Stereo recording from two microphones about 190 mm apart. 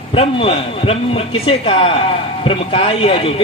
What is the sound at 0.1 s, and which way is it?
A man's voice, 30° left (ahead or behind).